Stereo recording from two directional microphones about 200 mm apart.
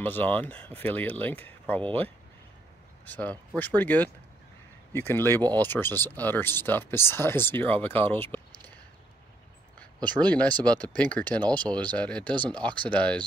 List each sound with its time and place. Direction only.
0.0 s speech: 10° left (ahead or behind)
3.1 s speech: 10° left (ahead or behind)
9.9 s speech: 20° right (ahead or behind)
10.2 s speech: 5° left (ahead or behind)